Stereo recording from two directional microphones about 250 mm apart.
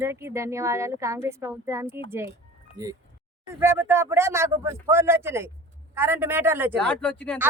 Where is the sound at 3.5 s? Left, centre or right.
Centre.